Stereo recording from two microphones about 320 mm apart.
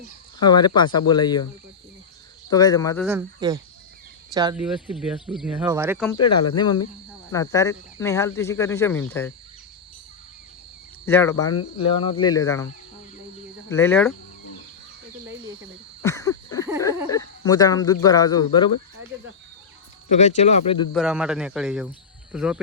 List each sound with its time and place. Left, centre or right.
0.3 s speech: centre
2.5 s speech: centre
3.1 s speech: centre
6.1 s speech: centre
11.0 s speech: centre
13.7 s speech: centre
16.0 s a sound: centre
17.1 s cricket: centre
18.0 s speech: centre
20.1 s speech: left
20.9 s speech: centre